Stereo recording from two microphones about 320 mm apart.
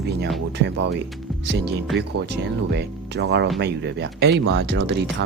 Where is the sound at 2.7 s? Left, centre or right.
Right.